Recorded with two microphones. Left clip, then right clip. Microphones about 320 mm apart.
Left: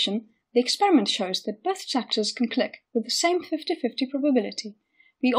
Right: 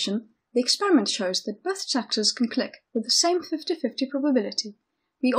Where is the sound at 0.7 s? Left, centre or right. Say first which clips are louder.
Even; centre.